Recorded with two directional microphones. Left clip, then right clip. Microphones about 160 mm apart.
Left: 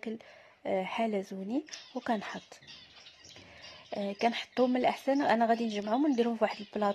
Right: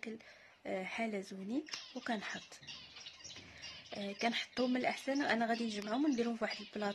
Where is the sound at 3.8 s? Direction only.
30° left (ahead or behind).